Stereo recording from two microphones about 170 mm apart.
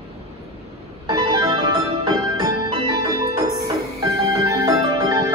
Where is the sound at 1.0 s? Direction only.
25° right (ahead or behind).